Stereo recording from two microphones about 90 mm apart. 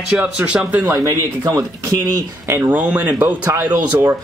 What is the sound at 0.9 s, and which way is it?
Speech, 35° right (ahead or behind).